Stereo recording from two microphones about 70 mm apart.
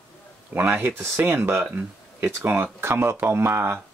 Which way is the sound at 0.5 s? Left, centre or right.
Right.